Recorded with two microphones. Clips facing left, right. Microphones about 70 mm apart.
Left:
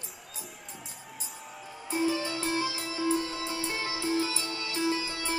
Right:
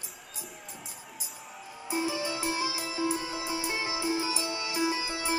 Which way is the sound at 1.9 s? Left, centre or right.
Centre.